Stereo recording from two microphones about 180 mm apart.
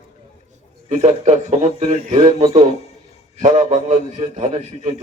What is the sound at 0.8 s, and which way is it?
A man's voice, 40° right (ahead or behind).